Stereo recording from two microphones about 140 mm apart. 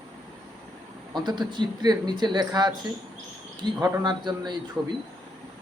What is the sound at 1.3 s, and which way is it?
Speech, 30° right (ahead or behind).